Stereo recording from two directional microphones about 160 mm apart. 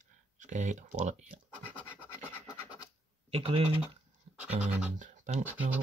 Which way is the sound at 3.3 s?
35° right (ahead or behind).